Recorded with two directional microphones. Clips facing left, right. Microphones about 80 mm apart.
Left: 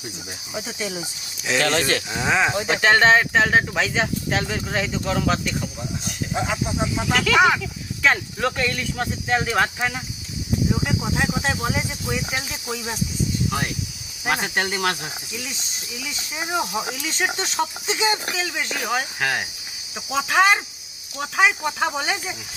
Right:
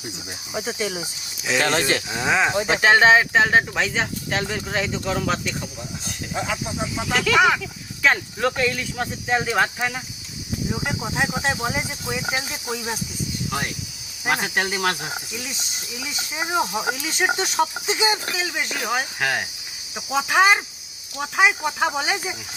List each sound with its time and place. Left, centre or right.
0.5 s cricket: right
1.5 s speech: centre
6.3 s speech: centre
6.8 s speech: centre
11.0 s speech: centre
12.3 s speech: right
14.3 s speech: centre
16.0 s speech: centre